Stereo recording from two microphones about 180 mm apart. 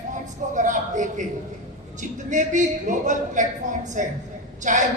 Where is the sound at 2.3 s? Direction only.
45° right (ahead or behind).